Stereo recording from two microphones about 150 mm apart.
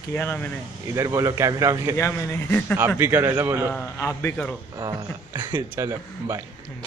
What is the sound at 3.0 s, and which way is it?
Speech, 15° right (ahead or behind).